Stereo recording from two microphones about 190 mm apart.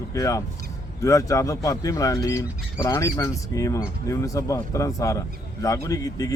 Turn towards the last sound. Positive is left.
turn(degrees=20)  # may be behind; listen again after turning